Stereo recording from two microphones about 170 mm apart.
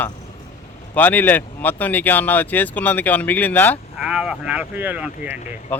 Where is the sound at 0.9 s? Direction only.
10° left (ahead or behind).